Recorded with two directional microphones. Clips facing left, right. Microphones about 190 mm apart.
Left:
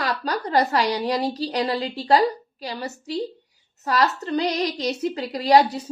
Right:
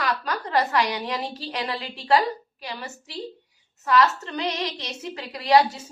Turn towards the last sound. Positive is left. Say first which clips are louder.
# left 2 dB
turn(degrees=35)  # may be behind; listen again after turning